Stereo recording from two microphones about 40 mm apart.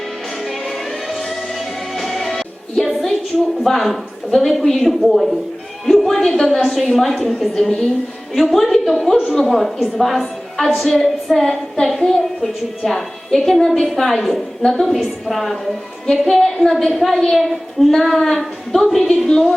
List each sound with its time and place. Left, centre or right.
1.1 s music: centre
3.6 s a woman's voice: centre
5.8 s a sound: centre
6.1 s a woman's voice: centre